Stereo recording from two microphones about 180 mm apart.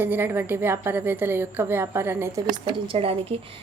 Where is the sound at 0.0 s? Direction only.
10° right (ahead or behind).